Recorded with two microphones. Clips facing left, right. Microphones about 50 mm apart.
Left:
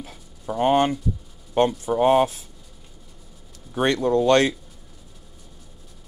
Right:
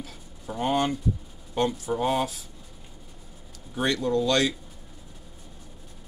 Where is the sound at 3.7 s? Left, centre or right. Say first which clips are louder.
Left 5 dB; left.